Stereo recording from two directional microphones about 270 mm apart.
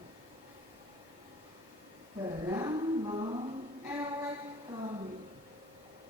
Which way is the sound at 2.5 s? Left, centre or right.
Centre.